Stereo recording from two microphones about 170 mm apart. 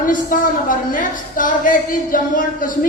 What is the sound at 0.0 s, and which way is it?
A woman's voice, 55° left (ahead or behind).